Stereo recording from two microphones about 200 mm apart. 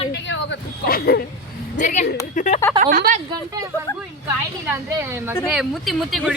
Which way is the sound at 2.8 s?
45° right (ahead or behind).